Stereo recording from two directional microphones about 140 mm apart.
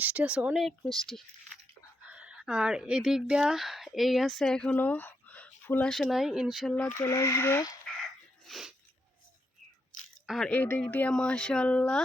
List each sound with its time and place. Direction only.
0.0 s speech: 10° right (ahead or behind)
2.0 s speech: 10° right (ahead or behind)
6.9 s speech: 20° left (ahead or behind)
8.4 s sneeze: centre (ahead or behind)
10.2 s speech: centre (ahead or behind)
10.5 s speech: 10° left (ahead or behind)